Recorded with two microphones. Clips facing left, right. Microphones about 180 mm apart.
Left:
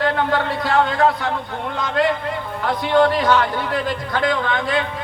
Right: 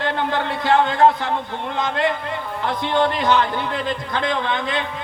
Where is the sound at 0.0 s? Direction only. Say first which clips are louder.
Left 3 dB; 20° right (ahead or behind).